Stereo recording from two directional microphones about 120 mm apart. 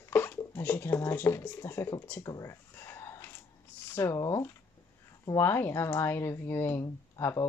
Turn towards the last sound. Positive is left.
turn(degrees=25)  # may be behind; listen again after turning